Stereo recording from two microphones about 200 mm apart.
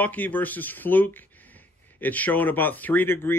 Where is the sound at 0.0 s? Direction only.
10° left (ahead or behind).